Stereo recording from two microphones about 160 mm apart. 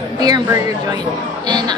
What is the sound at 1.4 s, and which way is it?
Speech, 25° right (ahead or behind).